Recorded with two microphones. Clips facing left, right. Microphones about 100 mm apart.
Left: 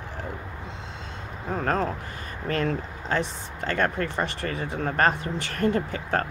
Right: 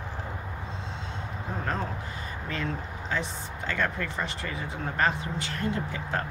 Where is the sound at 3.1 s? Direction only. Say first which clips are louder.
Left 5 dB; 55° left (ahead or behind).